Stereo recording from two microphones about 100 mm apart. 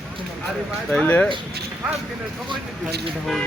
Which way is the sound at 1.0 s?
15° left (ahead or behind).